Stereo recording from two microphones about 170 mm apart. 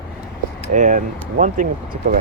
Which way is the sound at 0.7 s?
50° right (ahead or behind).